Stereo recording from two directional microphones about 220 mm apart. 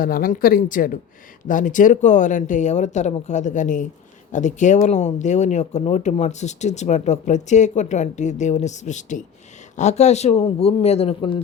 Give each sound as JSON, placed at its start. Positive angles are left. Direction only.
{"t": 0.0, "sound": "speech", "side_deg": 40}